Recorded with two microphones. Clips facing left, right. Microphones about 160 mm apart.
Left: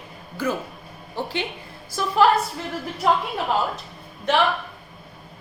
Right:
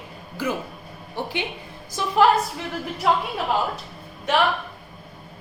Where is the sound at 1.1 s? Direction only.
15° right (ahead or behind).